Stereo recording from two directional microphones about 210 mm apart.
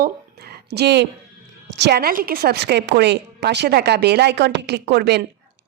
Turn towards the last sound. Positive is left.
turn(degrees=-50)  # may be behind; listen again after turning